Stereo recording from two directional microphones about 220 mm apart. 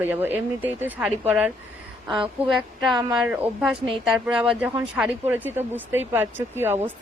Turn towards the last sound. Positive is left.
turn(degrees=-10)  # may be behind; listen again after turning